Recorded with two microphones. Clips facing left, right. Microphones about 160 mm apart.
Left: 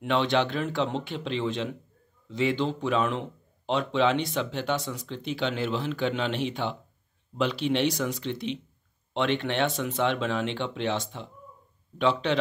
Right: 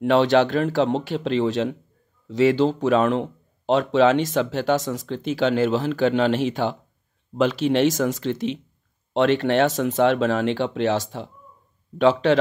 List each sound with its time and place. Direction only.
0.0 s a man's voice: 40° right (ahead or behind)
2.9 s a man's voice: 40° right (ahead or behind)